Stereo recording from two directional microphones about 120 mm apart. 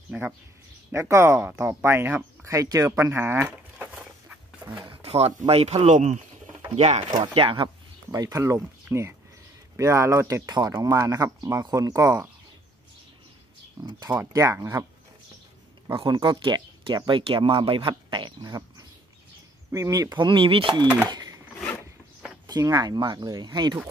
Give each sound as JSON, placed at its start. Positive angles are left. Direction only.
{"t": 0.9, "sound": "speech", "side_deg": -25}
{"t": 5.0, "sound": "a sound", "side_deg": -60}
{"t": 5.5, "sound": "speech", "side_deg": -60}
{"t": 6.7, "sound": "speech", "side_deg": -65}
{"t": 7.3, "sound": "speech", "side_deg": -45}
{"t": 8.1, "sound": "speech", "side_deg": -30}
{"t": 13.8, "sound": "speech", "side_deg": -35}
{"t": 16.0, "sound": "speech", "side_deg": -40}
{"t": 21.1, "sound": "a sound", "side_deg": -30}
{"t": 22.5, "sound": "speech", "side_deg": -30}